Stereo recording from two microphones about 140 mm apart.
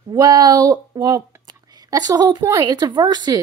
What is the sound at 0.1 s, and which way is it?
Speech, 30° right (ahead or behind).